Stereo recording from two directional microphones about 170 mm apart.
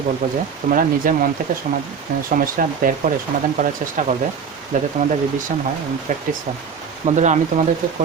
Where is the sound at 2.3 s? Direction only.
55° right (ahead or behind).